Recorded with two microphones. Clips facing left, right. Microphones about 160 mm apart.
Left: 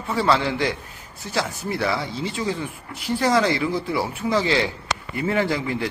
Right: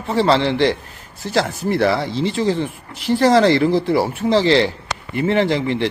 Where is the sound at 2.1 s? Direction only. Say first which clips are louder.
Right 8 dB; 90° right.